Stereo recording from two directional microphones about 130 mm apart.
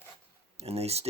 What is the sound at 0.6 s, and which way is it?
Speech, 55° right (ahead or behind).